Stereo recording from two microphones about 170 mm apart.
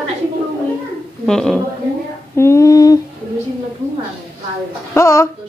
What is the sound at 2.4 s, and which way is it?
Speech, 15° left (ahead or behind).